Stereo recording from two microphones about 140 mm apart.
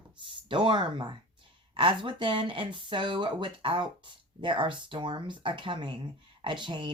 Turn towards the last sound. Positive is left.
turn(degrees=-35)  # may be behind; listen again after turning